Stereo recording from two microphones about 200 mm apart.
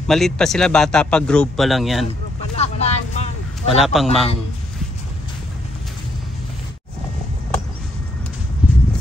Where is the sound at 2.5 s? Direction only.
30° left (ahead or behind).